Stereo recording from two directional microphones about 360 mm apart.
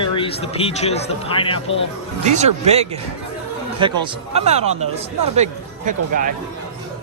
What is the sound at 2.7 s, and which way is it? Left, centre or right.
Speech, centre.